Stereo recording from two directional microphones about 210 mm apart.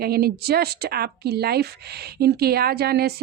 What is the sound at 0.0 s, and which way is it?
Speech, 45° right (ahead or behind).